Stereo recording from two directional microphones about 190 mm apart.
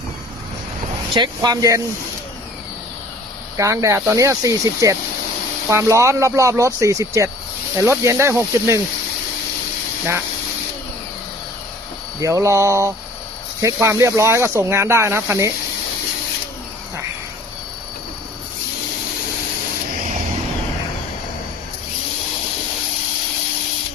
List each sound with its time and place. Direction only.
1.1 s speech: 25° right (ahead or behind)
3.6 s speech: 15° right (ahead or behind)
12.2 s speech: 15° right (ahead or behind)